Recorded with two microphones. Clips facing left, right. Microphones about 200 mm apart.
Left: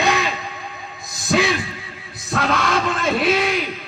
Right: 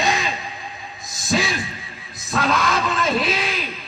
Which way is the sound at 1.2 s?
60° left (ahead or behind).